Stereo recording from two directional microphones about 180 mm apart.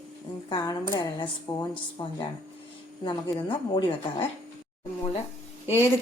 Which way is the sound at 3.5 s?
30° left (ahead or behind).